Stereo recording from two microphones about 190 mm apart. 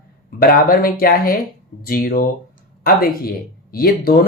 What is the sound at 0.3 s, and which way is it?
Speech, 50° left (ahead or behind).